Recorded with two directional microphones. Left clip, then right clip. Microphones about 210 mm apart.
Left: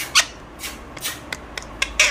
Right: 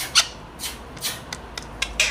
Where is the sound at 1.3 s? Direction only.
30° left (ahead or behind).